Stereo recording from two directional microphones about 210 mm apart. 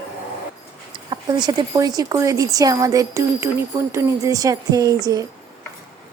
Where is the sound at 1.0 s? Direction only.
20° right (ahead or behind).